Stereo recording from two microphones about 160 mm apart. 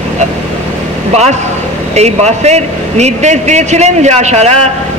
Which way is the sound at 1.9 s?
45° right (ahead or behind).